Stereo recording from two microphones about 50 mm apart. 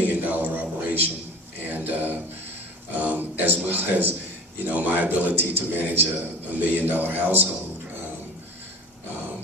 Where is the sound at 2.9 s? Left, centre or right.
Right.